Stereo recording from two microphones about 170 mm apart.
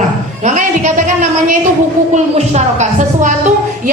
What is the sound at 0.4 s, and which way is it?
A woman's voice, 45° right (ahead or behind).